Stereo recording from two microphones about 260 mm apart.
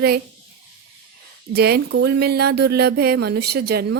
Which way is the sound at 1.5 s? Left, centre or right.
Right.